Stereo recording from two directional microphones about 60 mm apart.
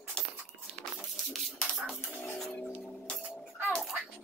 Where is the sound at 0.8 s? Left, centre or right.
Centre.